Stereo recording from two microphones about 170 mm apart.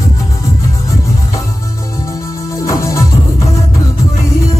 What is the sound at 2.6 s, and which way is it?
Music, 20° left (ahead or behind).